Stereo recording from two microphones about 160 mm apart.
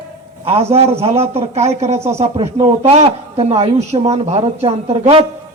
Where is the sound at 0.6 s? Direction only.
40° right (ahead or behind).